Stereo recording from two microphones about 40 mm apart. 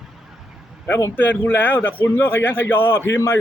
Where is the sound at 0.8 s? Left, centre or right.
Left.